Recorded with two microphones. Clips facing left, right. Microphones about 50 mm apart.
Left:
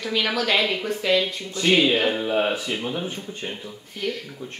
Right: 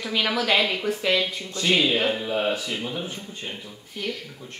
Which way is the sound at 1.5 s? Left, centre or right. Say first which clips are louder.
Left 3 dB; centre.